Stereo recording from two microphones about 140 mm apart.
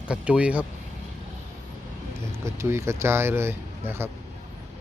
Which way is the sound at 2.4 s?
20° right (ahead or behind).